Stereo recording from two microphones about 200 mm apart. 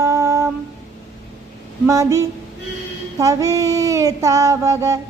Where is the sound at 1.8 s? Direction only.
15° right (ahead or behind).